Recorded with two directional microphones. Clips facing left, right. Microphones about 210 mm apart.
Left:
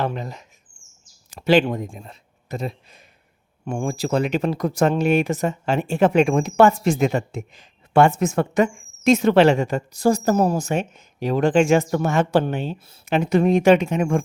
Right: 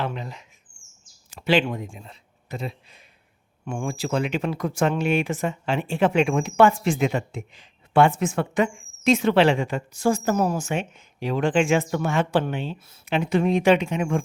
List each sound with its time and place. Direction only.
0.0 s speech: 45° left (ahead or behind)